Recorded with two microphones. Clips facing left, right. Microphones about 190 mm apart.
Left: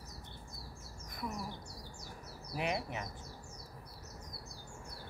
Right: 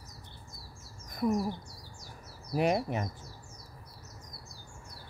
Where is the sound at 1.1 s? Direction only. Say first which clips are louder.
Right 13 dB; 50° right (ahead or behind).